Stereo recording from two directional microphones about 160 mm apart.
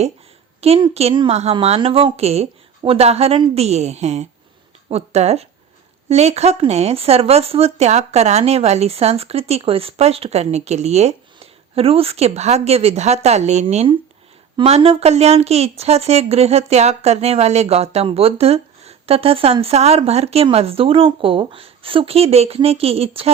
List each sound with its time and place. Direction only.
0.6 s a woman's voice: 40° right (ahead or behind)
14.5 s a woman's voice: 35° right (ahead or behind)